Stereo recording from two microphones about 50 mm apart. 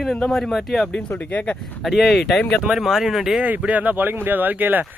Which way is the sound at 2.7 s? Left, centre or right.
Centre.